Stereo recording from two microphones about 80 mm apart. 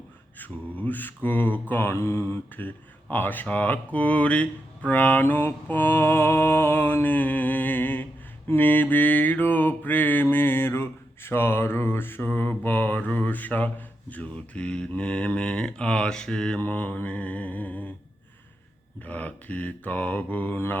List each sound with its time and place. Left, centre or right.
0.3 s mantra: left
16.6 s mantra: left
19.0 s mantra: centre